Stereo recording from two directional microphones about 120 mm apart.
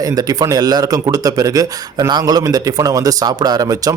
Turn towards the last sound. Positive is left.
turn(degrees=-30)  # may be behind; listen again after turning